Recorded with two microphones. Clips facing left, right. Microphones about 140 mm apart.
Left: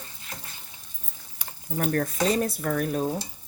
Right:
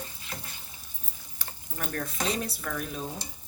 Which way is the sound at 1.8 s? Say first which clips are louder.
Left 8 dB; 45° left (ahead or behind).